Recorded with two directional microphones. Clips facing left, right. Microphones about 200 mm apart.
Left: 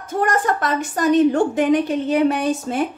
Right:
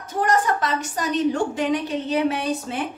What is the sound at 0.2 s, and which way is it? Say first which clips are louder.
A woman's voice: left 1 dB; 50° left (ahead or behind).